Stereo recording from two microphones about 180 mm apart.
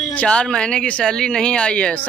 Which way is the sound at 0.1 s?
5° left (ahead or behind).